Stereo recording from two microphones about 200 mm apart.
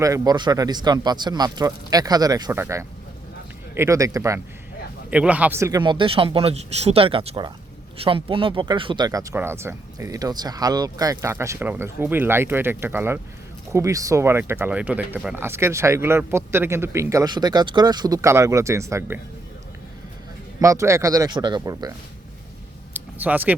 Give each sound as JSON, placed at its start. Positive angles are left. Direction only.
{"t": 0.0, "sound": "speech", "side_deg": -20}
{"t": 20.6, "sound": "speech", "side_deg": -15}
{"t": 23.0, "sound": "a sound", "side_deg": -10}